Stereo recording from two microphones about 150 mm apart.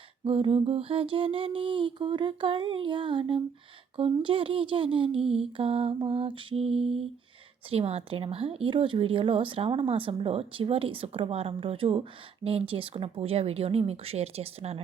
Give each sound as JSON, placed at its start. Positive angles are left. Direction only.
{"t": 0.3, "sound": "speech", "side_deg": -40}